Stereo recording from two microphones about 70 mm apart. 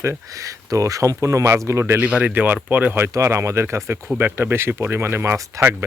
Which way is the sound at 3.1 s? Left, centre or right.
Right.